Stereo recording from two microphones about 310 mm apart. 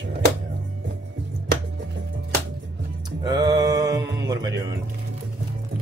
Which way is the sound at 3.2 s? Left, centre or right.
Centre.